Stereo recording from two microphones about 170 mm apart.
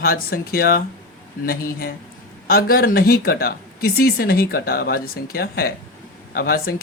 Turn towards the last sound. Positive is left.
turn(degrees=65)  # may be behind; listen again after turning